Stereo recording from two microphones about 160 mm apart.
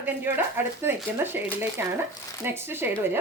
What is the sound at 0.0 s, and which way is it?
Speech, 15° right (ahead or behind).